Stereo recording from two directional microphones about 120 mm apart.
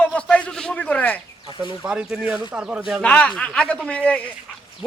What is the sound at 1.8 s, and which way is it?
A man's voice, 5° right (ahead or behind).